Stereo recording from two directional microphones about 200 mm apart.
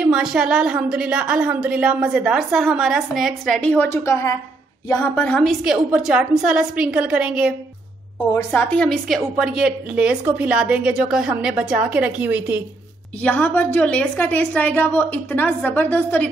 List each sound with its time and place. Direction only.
0.0 s a woman's voice: 5° right (ahead or behind)
8.4 s a woman's voice: 5° left (ahead or behind); by 12.6 s 10° right (ahead or behind)
13.2 s a woman's voice: 5° left (ahead or behind)